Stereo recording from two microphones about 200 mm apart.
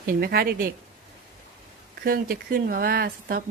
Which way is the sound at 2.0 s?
45° right (ahead or behind).